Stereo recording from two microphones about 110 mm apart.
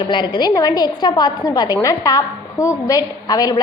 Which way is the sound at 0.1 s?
45° left (ahead or behind).